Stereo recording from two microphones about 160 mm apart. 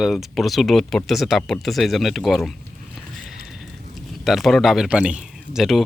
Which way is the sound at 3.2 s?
Centre (ahead or behind).